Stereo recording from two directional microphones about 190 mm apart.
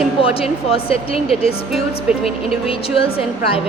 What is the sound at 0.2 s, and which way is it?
Speech, 30° left (ahead or behind).